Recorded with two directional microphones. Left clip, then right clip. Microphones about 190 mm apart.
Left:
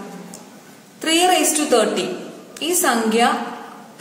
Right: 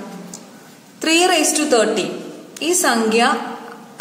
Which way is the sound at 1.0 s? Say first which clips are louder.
Right 1 dB; 20° right (ahead or behind).